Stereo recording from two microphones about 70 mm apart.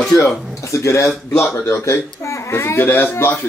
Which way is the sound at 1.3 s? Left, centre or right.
Centre.